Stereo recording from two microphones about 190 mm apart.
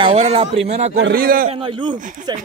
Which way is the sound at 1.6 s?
25° right (ahead or behind).